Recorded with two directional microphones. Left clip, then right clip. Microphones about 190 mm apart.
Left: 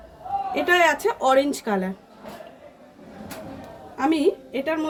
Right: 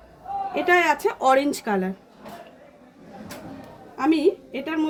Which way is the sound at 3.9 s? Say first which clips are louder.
Right 1 dB; 25° right (ahead or behind).